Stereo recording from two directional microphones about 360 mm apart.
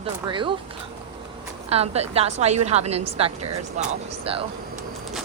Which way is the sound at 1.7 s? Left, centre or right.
Centre.